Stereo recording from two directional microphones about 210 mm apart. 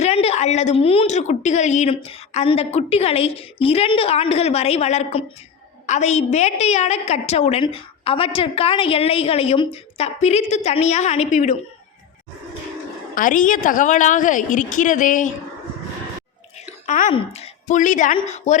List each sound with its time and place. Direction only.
0.0 s a woman's voice: 30° left (ahead or behind)
13.1 s a woman's voice: 40° left (ahead or behind)
16.6 s a sound: 35° left (ahead or behind)
17.1 s a woman's voice: 25° left (ahead or behind)